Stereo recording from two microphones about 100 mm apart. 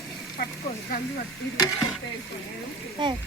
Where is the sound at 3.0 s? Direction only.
50° right (ahead or behind).